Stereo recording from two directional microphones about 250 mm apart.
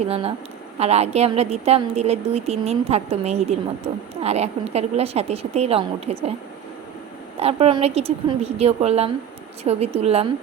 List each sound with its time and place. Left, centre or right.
0.1 s a woman's voice: right
7.3 s a woman's voice: right